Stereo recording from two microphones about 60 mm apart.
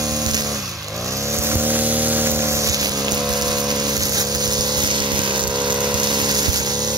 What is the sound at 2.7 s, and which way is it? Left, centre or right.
Boat, right.